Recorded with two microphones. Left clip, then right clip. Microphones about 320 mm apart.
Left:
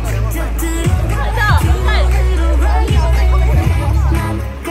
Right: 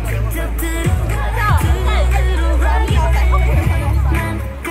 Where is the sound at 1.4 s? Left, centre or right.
Left.